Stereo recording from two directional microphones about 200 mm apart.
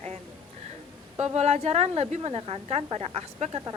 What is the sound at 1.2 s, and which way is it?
Speech, 30° right (ahead or behind).